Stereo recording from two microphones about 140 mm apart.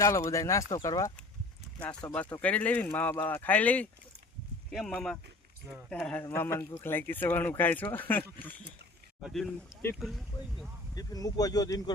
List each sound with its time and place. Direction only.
0.0 s speech: 20° left (ahead or behind)
1.8 s speech: 10° left (ahead or behind)
6.2 s speech: 15° left (ahead or behind)
9.2 s speech: centre (ahead or behind)
10.9 s speech: 25° left (ahead or behind)